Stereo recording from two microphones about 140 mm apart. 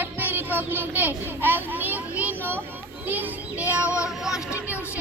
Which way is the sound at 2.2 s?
15° right (ahead or behind).